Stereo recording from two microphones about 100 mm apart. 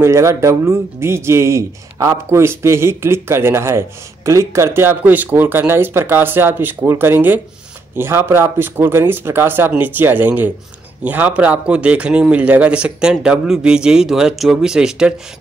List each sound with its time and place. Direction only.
0.0 s a man's voice: 30° right (ahead or behind); by 15.1 s 5° right (ahead or behind)